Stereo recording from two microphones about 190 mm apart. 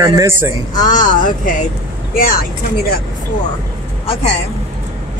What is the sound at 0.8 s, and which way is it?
Speech, 45° left (ahead or behind).